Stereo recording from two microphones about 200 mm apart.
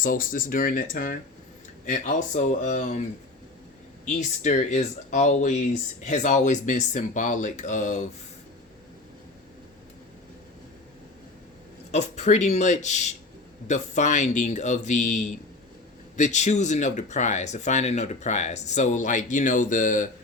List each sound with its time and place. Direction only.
0.0 s speech: 45° left (ahead or behind)
4.0 s speech: 35° left (ahead or behind)
11.9 s speech: 35° left (ahead or behind)